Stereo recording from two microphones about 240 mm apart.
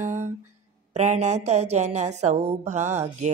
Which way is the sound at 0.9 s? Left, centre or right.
Right.